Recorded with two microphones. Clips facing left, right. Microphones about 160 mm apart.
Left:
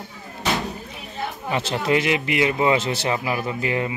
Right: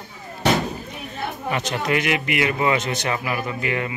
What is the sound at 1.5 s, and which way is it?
A man's voice, 25° left (ahead or behind).